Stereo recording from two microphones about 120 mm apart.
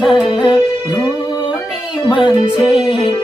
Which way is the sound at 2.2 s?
45° left (ahead or behind).